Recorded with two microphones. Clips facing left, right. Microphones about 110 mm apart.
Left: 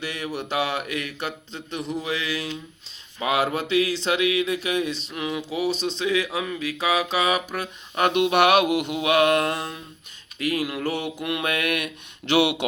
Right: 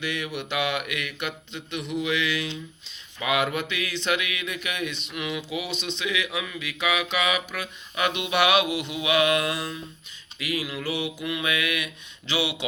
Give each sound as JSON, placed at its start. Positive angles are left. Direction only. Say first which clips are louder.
{"t": 0.0, "sound": "speech", "louder": "left 1 dB", "side_deg": 40}
{"t": 10.3, "sound": "mantra", "louder": "left 5 dB", "side_deg": 45}